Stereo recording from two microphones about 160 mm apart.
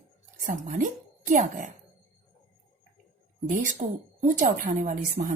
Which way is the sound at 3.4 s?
55° right (ahead or behind).